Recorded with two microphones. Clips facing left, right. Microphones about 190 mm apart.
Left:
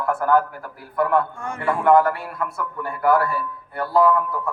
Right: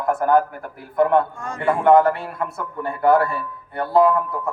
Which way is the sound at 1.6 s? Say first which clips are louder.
Right 2 dB; 25° right (ahead or behind).